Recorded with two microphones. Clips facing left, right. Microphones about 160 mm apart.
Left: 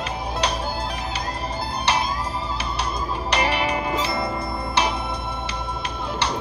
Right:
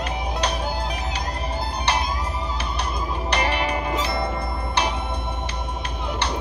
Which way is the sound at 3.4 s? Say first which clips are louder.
Left 2 dB; 10° left (ahead or behind).